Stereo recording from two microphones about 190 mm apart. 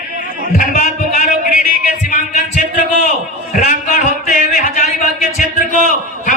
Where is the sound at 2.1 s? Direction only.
40° left (ahead or behind).